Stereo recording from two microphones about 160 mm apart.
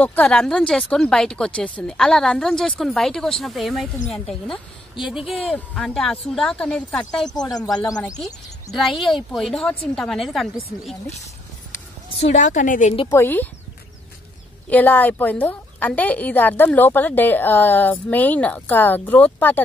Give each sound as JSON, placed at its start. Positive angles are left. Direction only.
{"t": 0.0, "sound": "speech", "side_deg": 10}
{"t": 7.5, "sound": "speech", "side_deg": 25}
{"t": 8.7, "sound": "speech", "side_deg": 0}
{"t": 12.2, "sound": "a woman's voice", "side_deg": 45}
{"t": 13.1, "sound": "a woman's voice", "side_deg": 10}
{"t": 14.7, "sound": "a woman's voice", "side_deg": 10}